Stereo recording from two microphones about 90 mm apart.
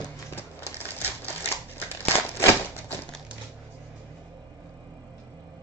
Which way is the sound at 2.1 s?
25° left (ahead or behind).